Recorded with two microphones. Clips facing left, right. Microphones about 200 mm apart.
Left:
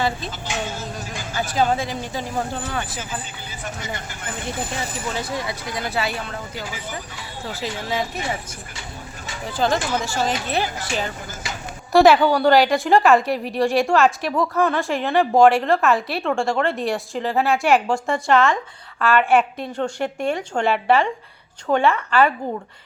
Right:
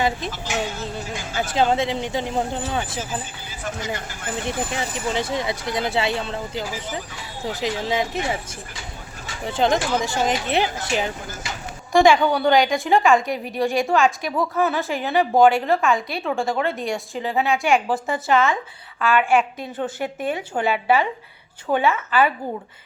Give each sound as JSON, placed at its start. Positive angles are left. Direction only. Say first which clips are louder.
{"t": 1.5, "sound": "speech", "louder": "right 2 dB", "side_deg": -25}
{"t": 5.1, "sound": "speech", "louder": "right 4 dB", "side_deg": -20}
{"t": 9.5, "sound": "speech", "louder": "right 1 dB", "side_deg": -20}
{"t": 11.9, "sound": "a woman's voice", "louder": "left 2 dB", "side_deg": 5}